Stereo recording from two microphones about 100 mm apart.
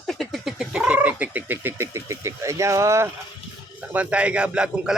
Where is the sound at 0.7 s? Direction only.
15° right (ahead or behind); by 3.1 s 30° right (ahead or behind).